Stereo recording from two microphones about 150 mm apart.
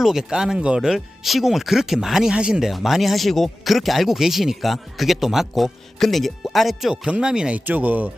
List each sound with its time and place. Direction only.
0.0 s speech: 5° right (ahead or behind)